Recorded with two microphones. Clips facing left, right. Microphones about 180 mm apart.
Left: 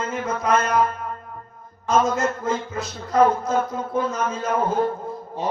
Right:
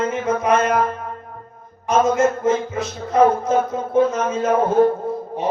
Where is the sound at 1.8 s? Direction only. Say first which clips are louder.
Right 4 dB; 20° right (ahead or behind).